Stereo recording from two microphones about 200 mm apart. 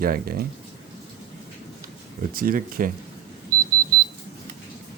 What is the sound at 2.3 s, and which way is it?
Speech, 45° right (ahead or behind).